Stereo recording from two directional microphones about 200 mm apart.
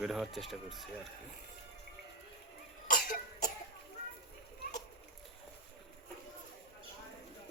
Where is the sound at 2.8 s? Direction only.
40° left (ahead or behind).